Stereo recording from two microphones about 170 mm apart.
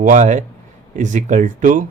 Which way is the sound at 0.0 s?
50° right (ahead or behind).